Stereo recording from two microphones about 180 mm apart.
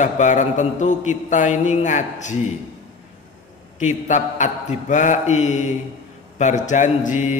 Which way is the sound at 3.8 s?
45° left (ahead or behind).